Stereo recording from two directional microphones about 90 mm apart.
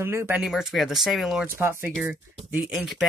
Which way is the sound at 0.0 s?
30° right (ahead or behind).